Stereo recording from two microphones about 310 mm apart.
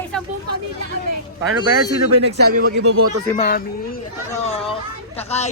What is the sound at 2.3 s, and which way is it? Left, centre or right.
Speech, right.